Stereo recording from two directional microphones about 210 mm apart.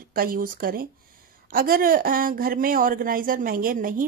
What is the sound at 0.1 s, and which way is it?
Speech, 45° right (ahead or behind).